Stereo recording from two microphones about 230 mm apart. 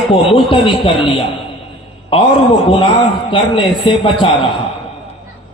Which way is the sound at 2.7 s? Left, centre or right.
Left.